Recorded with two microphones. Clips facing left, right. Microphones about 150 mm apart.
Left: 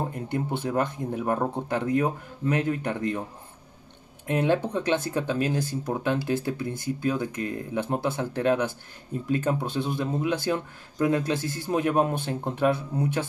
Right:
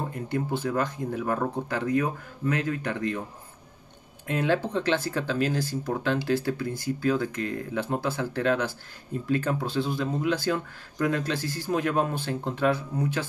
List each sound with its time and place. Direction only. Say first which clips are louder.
0.1 s speech: even; 20° left (ahead or behind)
4.3 s speech: left 2 dB; 20° left (ahead or behind)